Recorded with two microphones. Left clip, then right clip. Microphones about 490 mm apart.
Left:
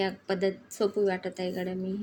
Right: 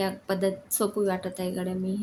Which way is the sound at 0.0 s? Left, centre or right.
Right.